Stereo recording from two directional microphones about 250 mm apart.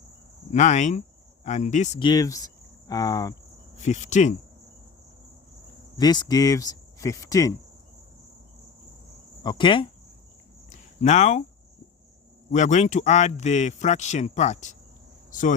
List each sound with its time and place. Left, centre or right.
0.5 s speech: left
3.8 s speech: left
6.0 s speech: centre
9.4 s cricket: centre
10.7 s a sound: left
12.5 s speech: left